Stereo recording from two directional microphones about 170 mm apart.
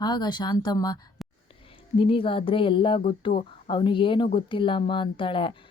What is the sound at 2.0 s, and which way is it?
Speech, 30° left (ahead or behind).